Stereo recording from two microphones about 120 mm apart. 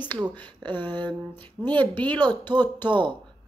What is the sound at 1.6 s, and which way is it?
Speech, 15° left (ahead or behind).